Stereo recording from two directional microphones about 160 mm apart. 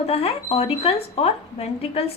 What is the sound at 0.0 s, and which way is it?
A woman's voice, 40° left (ahead or behind).